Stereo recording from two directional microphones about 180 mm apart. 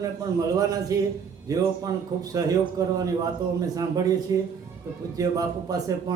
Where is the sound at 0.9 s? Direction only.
20° right (ahead or behind).